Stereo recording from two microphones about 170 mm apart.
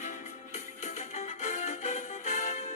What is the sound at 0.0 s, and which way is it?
Music, 45° left (ahead or behind).